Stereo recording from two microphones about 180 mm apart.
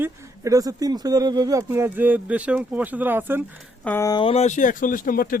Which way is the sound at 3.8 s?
15° left (ahead or behind).